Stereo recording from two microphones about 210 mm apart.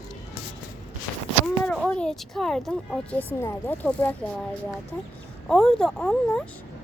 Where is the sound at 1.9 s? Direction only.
5° left (ahead or behind).